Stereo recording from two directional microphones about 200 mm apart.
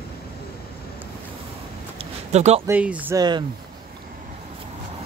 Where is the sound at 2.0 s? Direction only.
35° right (ahead or behind).